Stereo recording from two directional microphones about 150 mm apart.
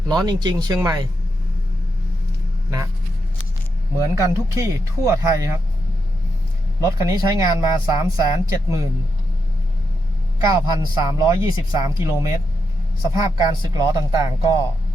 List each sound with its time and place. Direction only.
0.1 s speech: 30° right (ahead or behind)
3.9 s speech: 20° right (ahead or behind)
7.0 s speech: 25° right (ahead or behind)
10.8 s speech: 25° right (ahead or behind)